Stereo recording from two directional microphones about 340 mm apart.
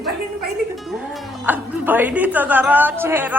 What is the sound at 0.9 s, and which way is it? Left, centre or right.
Speech, centre.